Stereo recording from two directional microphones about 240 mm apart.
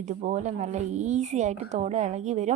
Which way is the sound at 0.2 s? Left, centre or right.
Right.